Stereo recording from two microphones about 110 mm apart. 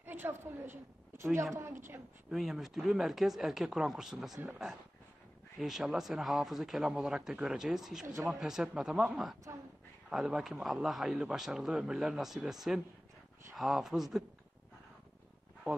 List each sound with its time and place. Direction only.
0.0 s a sound: 20° right (ahead or behind)
1.1 s a woman's voice: 25° right (ahead or behind)
2.3 s a man's voice: 5° right (ahead or behind)
5.6 s a man's voice: 5° right (ahead or behind)